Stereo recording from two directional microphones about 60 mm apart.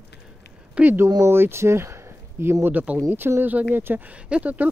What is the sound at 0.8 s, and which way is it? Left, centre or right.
Speech, right.